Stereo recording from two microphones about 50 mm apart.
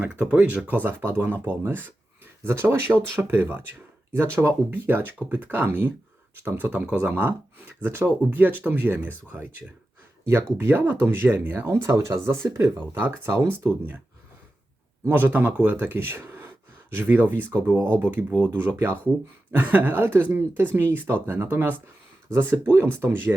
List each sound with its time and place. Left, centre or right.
0.0 s speech: right
0.9 s speech: right
2.6 s speech: right
11.6 s speech: right
15.0 s speech: right
19.5 s speech: right